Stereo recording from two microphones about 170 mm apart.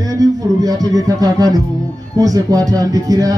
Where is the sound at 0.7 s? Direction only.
20° right (ahead or behind).